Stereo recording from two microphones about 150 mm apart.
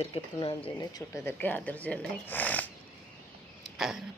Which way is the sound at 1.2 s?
15° left (ahead or behind).